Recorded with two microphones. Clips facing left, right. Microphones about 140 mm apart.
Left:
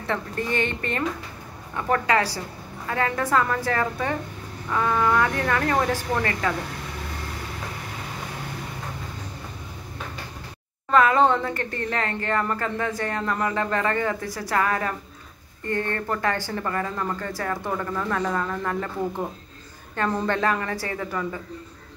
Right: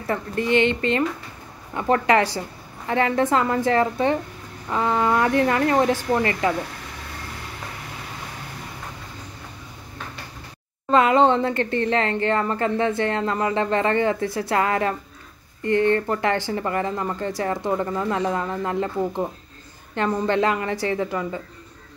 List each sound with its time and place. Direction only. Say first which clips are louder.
0.6 s speech: right 9 dB; 20° right (ahead or behind)
10.9 s speech: right 2 dB; 25° right (ahead or behind)